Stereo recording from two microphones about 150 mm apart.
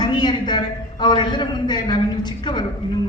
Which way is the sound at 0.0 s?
30° left (ahead or behind).